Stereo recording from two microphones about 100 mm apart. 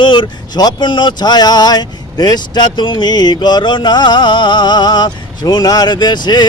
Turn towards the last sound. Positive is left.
turn(degrees=45)  # may be behind; listen again after turning